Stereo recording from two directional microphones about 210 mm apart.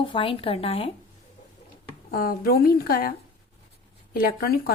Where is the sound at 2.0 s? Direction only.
45° left (ahead or behind).